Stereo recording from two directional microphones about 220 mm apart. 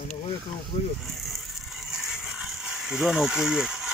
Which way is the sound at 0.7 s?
30° left (ahead or behind).